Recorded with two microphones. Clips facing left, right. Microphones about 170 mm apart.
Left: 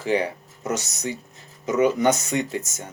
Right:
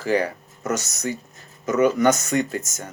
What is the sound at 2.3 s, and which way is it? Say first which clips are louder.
Speech: right 2 dB; 40° right (ahead or behind).